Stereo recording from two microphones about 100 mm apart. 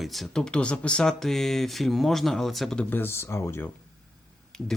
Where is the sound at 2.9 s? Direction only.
20° left (ahead or behind).